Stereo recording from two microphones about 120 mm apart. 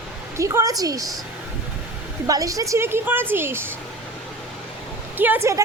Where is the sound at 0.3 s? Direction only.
25° right (ahead or behind).